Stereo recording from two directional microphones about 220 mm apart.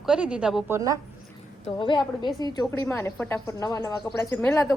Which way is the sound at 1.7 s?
20° left (ahead or behind).